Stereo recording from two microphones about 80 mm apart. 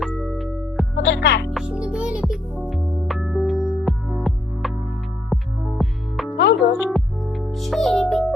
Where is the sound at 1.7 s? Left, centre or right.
Centre.